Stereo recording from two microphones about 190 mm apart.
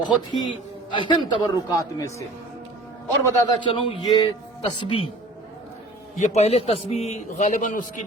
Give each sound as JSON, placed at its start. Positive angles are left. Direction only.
{"t": 0.0, "sound": "a man's voice", "side_deg": 25}
{"t": 3.5, "sound": "a man's voice", "side_deg": 25}
{"t": 6.1, "sound": "a man's voice", "side_deg": 40}